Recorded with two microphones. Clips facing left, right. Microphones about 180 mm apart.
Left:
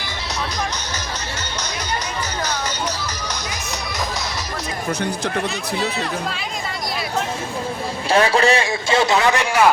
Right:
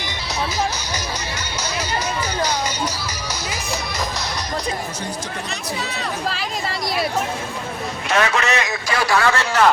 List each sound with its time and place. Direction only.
8.1 s a man's voice: 30° left (ahead or behind); by 9.7 s 10° left (ahead or behind)